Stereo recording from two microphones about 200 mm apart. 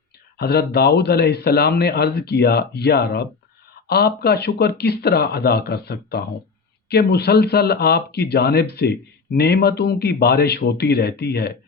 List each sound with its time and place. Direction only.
0.3 s speech: 50° left (ahead or behind)